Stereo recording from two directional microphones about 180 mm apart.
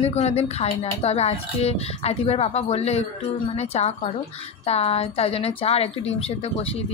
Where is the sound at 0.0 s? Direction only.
35° left (ahead or behind).